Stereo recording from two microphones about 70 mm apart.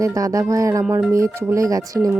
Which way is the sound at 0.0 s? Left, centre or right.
Right.